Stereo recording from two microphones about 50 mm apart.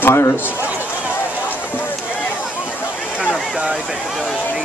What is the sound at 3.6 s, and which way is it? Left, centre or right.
Speech, centre.